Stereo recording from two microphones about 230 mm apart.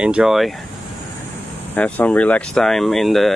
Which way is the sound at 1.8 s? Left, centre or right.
Centre.